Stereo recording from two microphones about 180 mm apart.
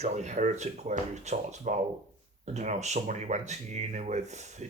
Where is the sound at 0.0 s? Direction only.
40° right (ahead or behind).